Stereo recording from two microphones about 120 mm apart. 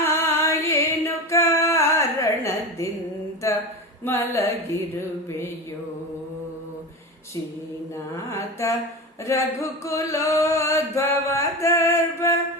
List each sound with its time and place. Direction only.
0.0 s a sound: 20° left (ahead or behind)
4.0 s singing: 20° left (ahead or behind)
8.1 s singing: 25° left (ahead or behind)